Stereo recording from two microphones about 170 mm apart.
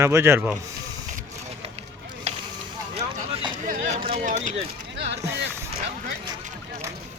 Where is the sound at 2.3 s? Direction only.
40° right (ahead or behind).